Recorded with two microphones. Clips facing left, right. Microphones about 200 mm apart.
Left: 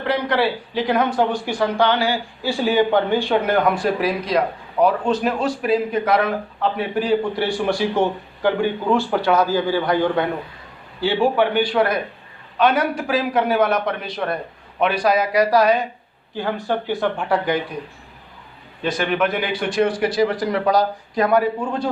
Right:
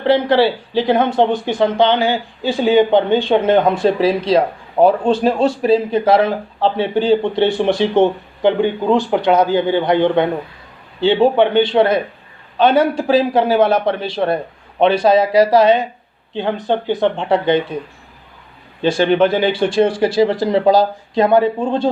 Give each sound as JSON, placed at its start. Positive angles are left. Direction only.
{"t": 0.0, "sound": "speech", "side_deg": -30}
{"t": 18.8, "sound": "speech", "side_deg": -30}